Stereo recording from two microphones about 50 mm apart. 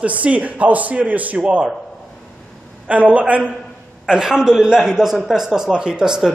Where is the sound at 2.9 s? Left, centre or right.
Right.